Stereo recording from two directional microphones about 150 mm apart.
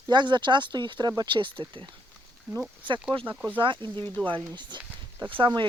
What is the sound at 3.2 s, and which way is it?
Speech, 10° right (ahead or behind).